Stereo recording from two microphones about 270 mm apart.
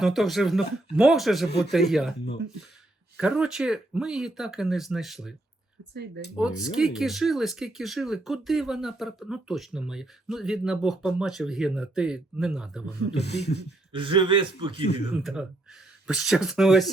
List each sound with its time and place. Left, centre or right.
0.0 s speech: centre
3.2 s speech: centre
5.9 s speech: right
6.3 s speech: centre
13.9 s a man's voice: centre
15.1 s speech: centre